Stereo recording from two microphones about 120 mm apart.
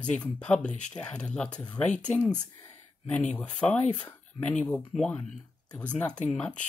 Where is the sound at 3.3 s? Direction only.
10° left (ahead or behind).